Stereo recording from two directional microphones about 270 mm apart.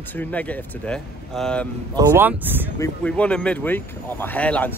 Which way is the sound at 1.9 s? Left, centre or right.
Centre.